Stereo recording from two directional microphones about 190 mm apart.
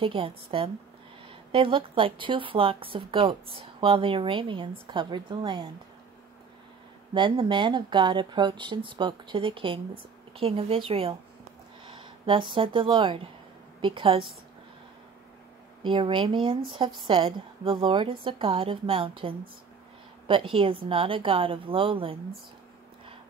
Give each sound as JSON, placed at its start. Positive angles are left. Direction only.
{"t": 0.0, "sound": "speech", "side_deg": -30}
{"t": 7.2, "sound": "speech", "side_deg": -25}
{"t": 15.8, "sound": "speech", "side_deg": -25}
{"t": 20.5, "sound": "speech", "side_deg": -30}